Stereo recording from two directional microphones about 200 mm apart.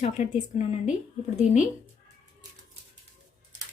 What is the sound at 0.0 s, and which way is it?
Speech, 35° left (ahead or behind).